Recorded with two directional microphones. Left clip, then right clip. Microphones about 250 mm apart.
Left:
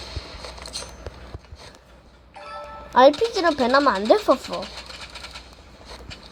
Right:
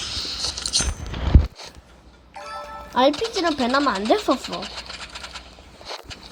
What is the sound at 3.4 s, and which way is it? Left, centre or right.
Speech, centre.